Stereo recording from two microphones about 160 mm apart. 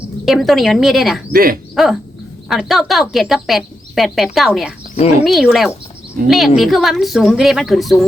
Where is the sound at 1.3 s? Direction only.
65° right (ahead or behind).